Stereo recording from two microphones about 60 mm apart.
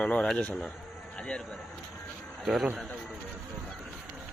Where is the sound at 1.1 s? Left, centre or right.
Centre.